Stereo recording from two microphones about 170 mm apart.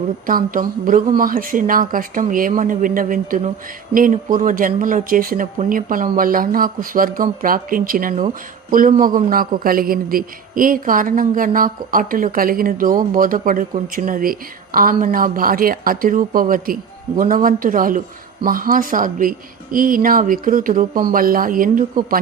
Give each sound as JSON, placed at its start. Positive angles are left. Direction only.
{"t": 0.3, "sound": "a woman's voice", "side_deg": -55}